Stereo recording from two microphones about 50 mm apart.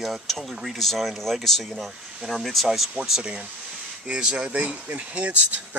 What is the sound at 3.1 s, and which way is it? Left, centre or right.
Speech, centre.